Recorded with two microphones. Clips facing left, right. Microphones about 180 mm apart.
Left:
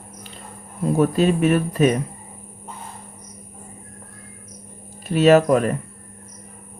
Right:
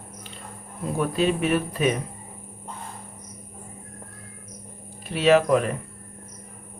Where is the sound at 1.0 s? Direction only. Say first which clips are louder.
Left 5 dB; 45° left (ahead or behind).